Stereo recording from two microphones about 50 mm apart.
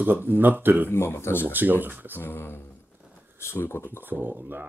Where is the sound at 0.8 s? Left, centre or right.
Left.